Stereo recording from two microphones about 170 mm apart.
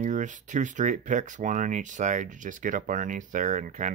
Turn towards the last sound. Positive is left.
turn(degrees=-45)  # may be behind; listen again after turning